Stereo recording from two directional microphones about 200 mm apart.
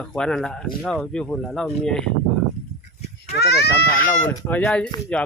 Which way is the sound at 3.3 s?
55° left (ahead or behind).